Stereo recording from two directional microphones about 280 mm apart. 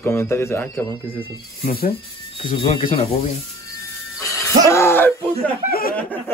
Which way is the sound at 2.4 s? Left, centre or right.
Left.